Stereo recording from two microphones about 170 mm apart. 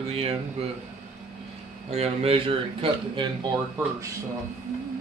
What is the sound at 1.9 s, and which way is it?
Speech, 35° right (ahead or behind).